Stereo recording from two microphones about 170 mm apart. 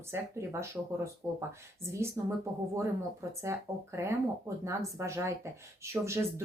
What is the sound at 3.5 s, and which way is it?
Speech, 15° right (ahead or behind).